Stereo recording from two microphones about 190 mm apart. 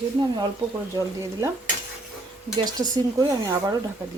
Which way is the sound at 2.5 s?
20° right (ahead or behind).